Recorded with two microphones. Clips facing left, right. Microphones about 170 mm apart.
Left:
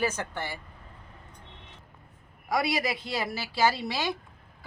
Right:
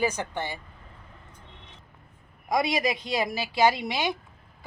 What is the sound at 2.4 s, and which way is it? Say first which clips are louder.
A woman's voice: right 3 dB; 20° right (ahead or behind).